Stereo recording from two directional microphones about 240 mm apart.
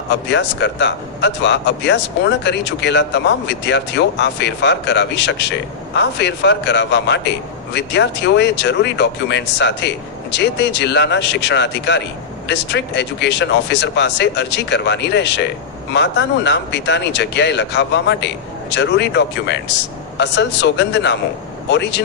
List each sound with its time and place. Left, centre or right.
0.1 s speech: left